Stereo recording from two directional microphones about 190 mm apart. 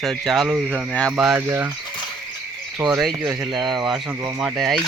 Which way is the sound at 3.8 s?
Centre (ahead or behind).